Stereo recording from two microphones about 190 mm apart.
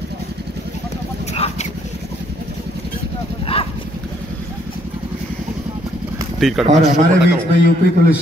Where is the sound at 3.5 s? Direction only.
30° left (ahead or behind).